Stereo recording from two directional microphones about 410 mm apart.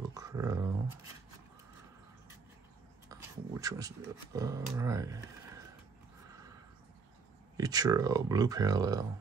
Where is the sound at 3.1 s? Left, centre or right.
Centre.